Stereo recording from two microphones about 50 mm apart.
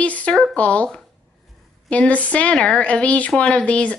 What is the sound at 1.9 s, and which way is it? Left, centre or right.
A woman's voice, left.